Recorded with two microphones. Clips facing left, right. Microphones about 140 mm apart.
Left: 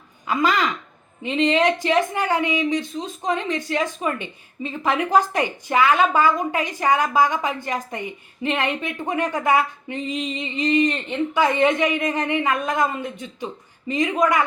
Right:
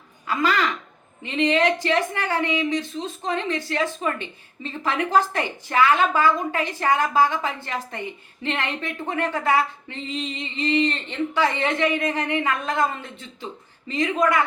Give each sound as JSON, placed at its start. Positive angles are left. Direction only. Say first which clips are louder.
{"t": 0.3, "sound": "a woman's voice", "louder": "left 2 dB", "side_deg": 15}